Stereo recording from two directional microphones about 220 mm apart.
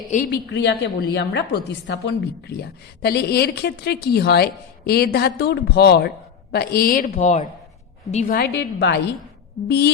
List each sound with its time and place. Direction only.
0.1 s a woman's voice: 40° left (ahead or behind)
0.5 s a woman's voice: 50° left (ahead or behind); by 8.4 s 30° left (ahead or behind)
8.4 s a woman's voice: 50° left (ahead or behind)